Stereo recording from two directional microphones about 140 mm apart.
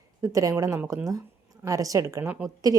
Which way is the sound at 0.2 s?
25° right (ahead or behind).